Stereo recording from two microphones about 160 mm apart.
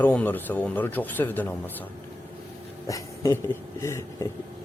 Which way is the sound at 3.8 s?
20° left (ahead or behind).